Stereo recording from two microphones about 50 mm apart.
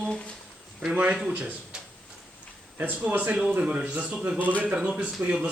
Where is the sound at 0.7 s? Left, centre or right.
Right.